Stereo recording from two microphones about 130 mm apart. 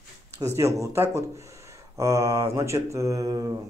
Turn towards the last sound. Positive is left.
turn(degrees=-25)  # may be behind; listen again after turning